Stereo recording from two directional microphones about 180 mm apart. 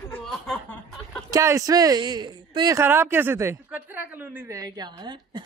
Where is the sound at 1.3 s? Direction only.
20° right (ahead or behind).